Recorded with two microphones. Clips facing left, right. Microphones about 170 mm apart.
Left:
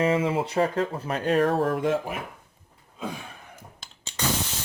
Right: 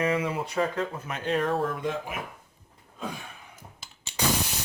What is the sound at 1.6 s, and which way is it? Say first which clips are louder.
Speech: left 6 dB; 65° left (ahead or behind).